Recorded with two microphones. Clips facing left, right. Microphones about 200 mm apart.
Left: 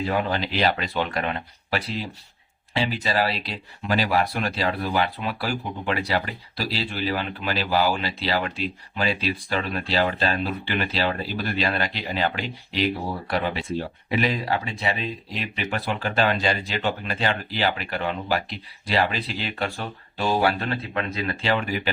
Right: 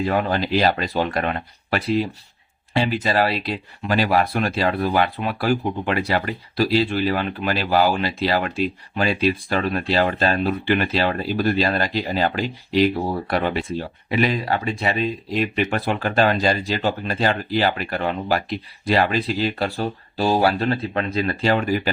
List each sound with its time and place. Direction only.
0.1 s speech: 45° right (ahead or behind)